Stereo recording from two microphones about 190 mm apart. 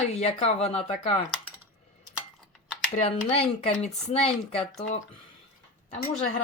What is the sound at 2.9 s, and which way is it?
Speech, 30° left (ahead or behind).